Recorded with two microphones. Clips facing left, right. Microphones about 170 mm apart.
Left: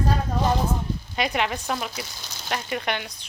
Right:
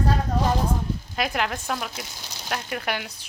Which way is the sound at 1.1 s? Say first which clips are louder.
Left 2 dB; centre (ahead or behind).